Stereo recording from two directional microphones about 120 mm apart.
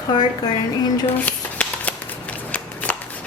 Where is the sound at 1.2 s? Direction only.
10° left (ahead or behind).